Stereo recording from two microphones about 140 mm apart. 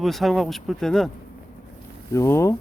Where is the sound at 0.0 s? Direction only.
Centre (ahead or behind).